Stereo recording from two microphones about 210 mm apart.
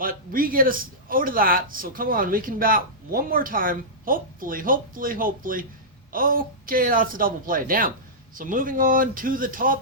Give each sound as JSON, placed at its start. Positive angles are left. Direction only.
{"t": 0.0, "sound": "a man's voice", "side_deg": -40}